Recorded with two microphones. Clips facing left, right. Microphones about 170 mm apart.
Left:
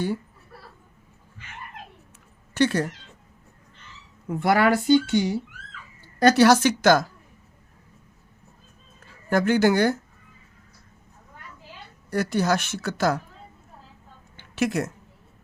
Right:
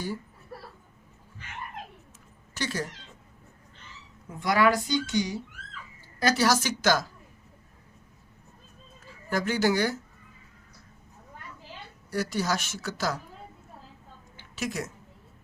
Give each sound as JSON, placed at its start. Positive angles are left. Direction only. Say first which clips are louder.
{"t": 2.6, "sound": "a woman's voice", "louder": "left 11 dB", "side_deg": 60}
{"t": 4.3, "sound": "a woman's voice", "louder": "left 4 dB", "side_deg": 65}
{"t": 9.3, "sound": "a woman's voice", "louder": "left 6 dB", "side_deg": 55}
{"t": 12.1, "sound": "a woman's voice", "louder": "left 6 dB", "side_deg": 60}
{"t": 14.3, "sound": "a sound", "louder": "left 8 dB", "side_deg": 65}